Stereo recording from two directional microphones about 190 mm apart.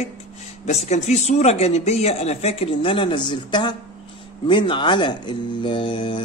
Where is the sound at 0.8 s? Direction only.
35° left (ahead or behind).